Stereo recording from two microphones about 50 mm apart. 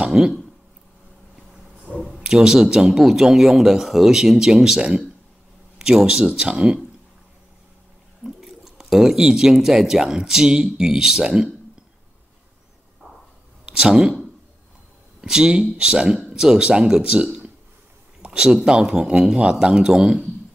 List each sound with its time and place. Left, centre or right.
0.1 s speech: centre
2.0 s speech: centre
8.2 s speech: centre
13.7 s speech: centre
15.2 s speech: centre